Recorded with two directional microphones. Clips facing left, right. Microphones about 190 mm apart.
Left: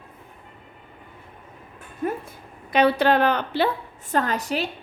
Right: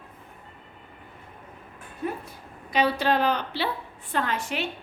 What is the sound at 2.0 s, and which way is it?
A woman's voice, 50° left (ahead or behind).